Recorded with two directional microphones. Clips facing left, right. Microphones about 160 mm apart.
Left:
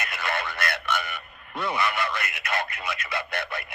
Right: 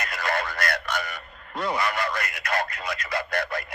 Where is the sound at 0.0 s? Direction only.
25° left (ahead or behind).